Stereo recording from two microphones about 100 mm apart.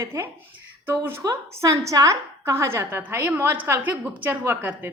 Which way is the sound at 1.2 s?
35° right (ahead or behind).